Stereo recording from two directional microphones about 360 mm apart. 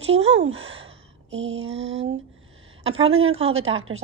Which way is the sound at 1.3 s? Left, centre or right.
Right.